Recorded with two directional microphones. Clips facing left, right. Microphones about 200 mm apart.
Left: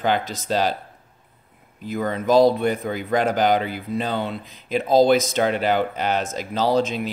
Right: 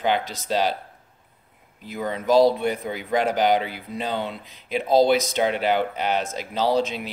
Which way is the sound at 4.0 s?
15° right (ahead or behind).